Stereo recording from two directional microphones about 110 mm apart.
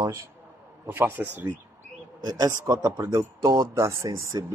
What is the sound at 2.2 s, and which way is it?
Speech, 30° right (ahead or behind).